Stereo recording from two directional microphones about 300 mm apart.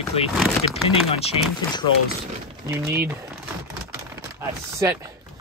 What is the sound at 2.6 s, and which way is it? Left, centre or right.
Speech, centre.